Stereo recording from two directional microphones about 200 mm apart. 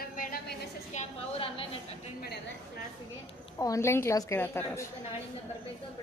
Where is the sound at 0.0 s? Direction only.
45° left (ahead or behind).